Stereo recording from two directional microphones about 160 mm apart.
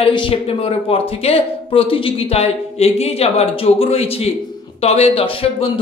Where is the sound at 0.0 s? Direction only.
35° left (ahead or behind).